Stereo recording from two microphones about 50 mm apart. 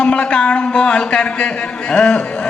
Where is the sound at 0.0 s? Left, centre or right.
Centre.